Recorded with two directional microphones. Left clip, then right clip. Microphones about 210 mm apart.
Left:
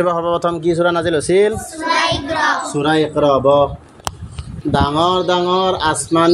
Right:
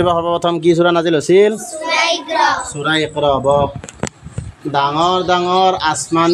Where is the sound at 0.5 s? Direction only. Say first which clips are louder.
Right 3 dB; 30° right (ahead or behind).